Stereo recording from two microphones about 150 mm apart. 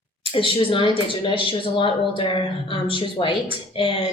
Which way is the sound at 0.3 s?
35° left (ahead or behind).